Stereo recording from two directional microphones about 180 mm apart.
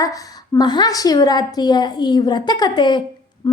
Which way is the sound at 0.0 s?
20° left (ahead or behind).